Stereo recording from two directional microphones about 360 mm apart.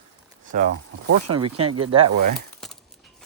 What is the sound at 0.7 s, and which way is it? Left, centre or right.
Speech, right.